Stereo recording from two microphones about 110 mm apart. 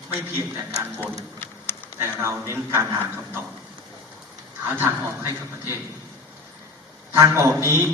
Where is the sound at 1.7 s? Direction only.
20° left (ahead or behind).